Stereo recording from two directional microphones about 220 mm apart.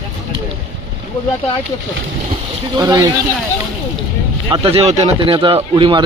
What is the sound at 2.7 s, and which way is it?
Speech, 15° right (ahead or behind).